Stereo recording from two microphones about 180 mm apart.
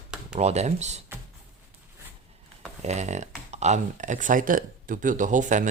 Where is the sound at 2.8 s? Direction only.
40° right (ahead or behind).